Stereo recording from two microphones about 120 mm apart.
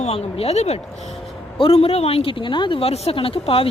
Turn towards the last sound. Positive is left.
turn(degrees=50)  # may be behind; listen again after turning